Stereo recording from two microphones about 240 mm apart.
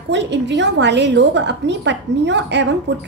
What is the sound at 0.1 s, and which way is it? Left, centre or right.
A woman's voice, right.